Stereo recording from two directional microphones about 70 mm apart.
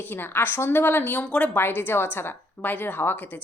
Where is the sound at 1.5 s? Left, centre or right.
Left.